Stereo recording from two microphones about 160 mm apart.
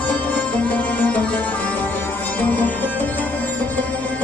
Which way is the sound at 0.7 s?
10° left (ahead or behind).